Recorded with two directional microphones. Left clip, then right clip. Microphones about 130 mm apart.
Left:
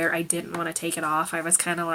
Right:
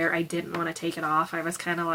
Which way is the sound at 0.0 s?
30° left (ahead or behind).